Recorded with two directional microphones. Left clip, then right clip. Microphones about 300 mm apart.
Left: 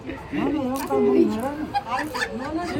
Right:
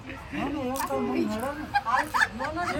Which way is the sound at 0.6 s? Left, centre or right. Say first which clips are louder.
Left 3 dB; right.